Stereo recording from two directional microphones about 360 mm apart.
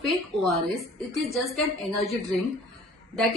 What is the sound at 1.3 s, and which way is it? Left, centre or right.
A woman's voice, centre.